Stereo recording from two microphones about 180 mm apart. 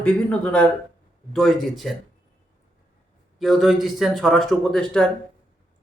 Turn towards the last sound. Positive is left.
turn(degrees=5)  # may be behind; listen again after turning